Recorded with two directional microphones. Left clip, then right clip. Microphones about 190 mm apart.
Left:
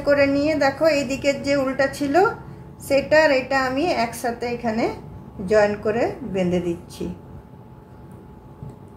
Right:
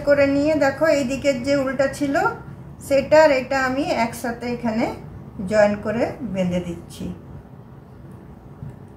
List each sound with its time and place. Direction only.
0.0 s a woman's voice: 30° left (ahead or behind)